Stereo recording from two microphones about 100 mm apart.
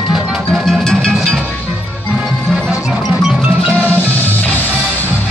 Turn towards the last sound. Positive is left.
turn(degrees=15)  # may be behind; listen again after turning